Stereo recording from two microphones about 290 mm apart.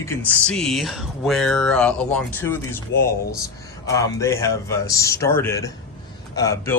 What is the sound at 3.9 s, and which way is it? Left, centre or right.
A man's voice, centre.